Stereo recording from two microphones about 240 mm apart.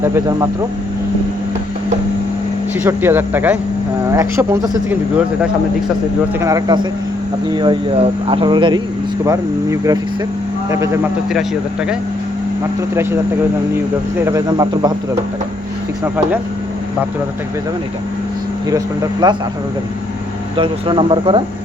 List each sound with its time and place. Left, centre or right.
0.0 s speech: centre
2.8 s speech: centre
6.4 s speech: centre
12.9 s speech: centre
19.2 s speech: centre
20.6 s speech: right